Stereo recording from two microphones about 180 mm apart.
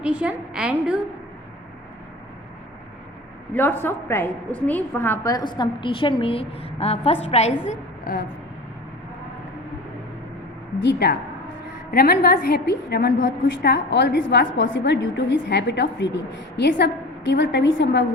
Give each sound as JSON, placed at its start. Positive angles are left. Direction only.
{"t": 0.0, "sound": "a woman's voice", "side_deg": -5}
{"t": 3.5, "sound": "a woman's voice", "side_deg": 10}
{"t": 10.8, "sound": "a woman's voice", "side_deg": 70}
{"t": 11.9, "sound": "a woman's voice", "side_deg": 60}